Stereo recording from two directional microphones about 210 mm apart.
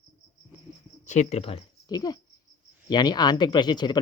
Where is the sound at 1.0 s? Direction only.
35° left (ahead or behind).